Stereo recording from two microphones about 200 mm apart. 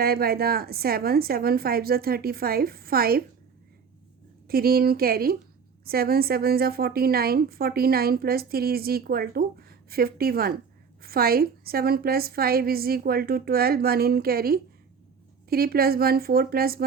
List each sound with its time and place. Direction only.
0.0 s a woman's voice: 50° right (ahead or behind)
4.4 s a woman's voice: 50° right (ahead or behind)